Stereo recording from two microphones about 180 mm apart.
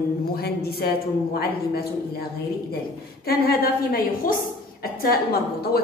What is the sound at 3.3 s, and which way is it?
Speech, 55° left (ahead or behind).